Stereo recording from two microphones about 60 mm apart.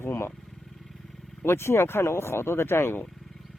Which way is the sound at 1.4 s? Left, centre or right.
Left.